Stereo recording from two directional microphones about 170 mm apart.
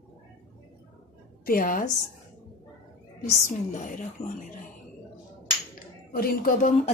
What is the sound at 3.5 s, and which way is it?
A woman's voice, 45° left (ahead or behind).